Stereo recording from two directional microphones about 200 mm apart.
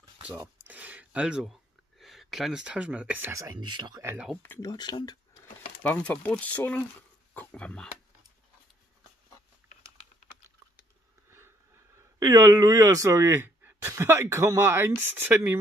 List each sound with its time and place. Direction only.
0.7 s speech: 10° right (ahead or behind)
4.4 s speech: 15° left (ahead or behind)
5.8 s speech: 5° left (ahead or behind)
11.2 s speech: 10° right (ahead or behind)